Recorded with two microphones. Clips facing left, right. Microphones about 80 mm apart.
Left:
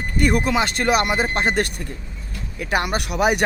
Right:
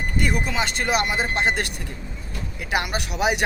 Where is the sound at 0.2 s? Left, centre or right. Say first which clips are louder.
Left 6 dB; left.